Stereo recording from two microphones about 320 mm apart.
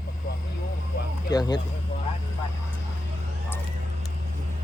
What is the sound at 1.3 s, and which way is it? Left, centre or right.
Speech, centre.